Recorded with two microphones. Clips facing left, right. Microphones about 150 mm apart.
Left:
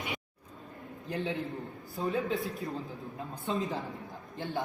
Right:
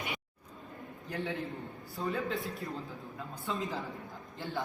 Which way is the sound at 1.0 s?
20° left (ahead or behind).